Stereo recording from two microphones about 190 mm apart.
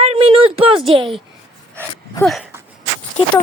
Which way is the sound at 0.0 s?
30° right (ahead or behind).